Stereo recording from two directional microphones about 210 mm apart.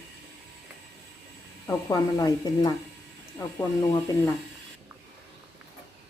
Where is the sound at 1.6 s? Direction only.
15° left (ahead or behind).